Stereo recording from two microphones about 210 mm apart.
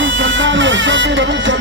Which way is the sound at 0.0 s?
65° right (ahead or behind).